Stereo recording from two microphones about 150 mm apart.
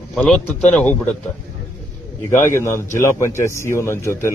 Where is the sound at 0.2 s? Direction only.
5° left (ahead or behind).